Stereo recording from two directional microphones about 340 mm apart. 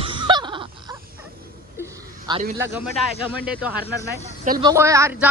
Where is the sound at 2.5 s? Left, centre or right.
Centre.